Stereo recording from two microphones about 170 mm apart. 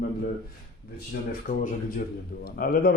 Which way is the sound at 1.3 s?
60° left (ahead or behind).